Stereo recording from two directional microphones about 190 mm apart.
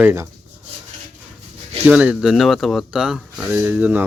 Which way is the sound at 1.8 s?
5° right (ahead or behind).